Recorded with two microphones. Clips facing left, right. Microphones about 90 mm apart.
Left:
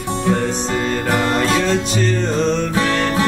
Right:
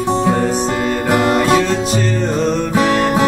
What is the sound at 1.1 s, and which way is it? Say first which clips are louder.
Music: right 5 dB; 5° right (ahead or behind).